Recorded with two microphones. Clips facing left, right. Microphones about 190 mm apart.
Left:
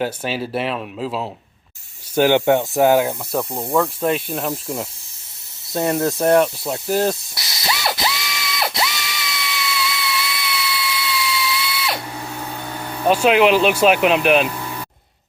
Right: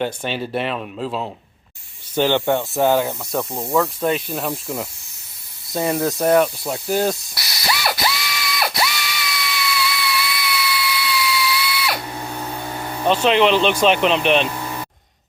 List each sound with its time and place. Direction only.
0.0 s speech: 5° left (ahead or behind)
7.3 s ratchet: 20° left (ahead or behind)
11.0 s a sound: 25° left (ahead or behind)
13.1 s speech: 10° left (ahead or behind)